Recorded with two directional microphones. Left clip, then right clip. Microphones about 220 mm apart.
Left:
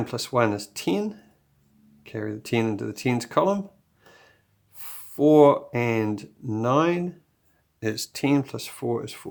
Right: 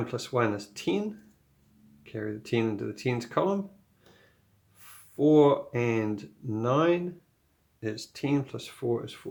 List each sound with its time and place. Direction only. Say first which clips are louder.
0.0 s speech: left 5 dB; 30° left (ahead or behind)
4.7 s speech: left 5 dB; 35° left (ahead or behind)